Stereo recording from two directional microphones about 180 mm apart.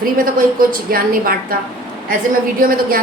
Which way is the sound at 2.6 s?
50° right (ahead or behind).